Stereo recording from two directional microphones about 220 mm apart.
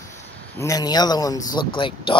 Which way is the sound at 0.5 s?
15° left (ahead or behind).